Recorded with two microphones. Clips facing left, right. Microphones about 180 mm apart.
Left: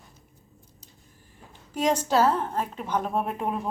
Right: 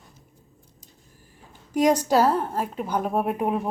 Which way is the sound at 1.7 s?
15° right (ahead or behind).